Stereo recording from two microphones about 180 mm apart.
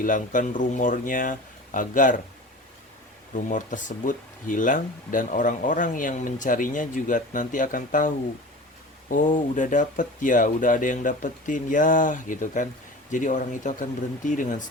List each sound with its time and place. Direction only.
0.0 s speech: 45° left (ahead or behind)
3.3 s speech: 45° left (ahead or behind)